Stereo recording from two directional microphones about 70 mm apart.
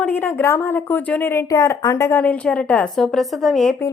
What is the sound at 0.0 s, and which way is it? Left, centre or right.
Speech, left.